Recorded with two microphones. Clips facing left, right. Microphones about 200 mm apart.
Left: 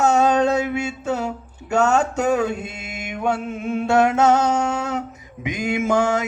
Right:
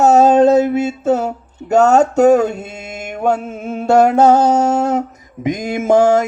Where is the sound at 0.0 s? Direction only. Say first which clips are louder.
Right 7 dB; 40° right (ahead or behind).